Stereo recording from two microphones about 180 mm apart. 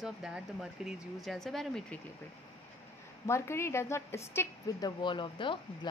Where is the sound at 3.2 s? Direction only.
15° left (ahead or behind).